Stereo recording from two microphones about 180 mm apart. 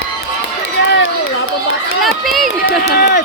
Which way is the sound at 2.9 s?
60° left (ahead or behind).